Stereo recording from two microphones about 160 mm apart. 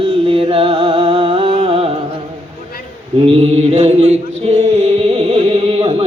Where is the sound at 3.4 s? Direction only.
40° right (ahead or behind).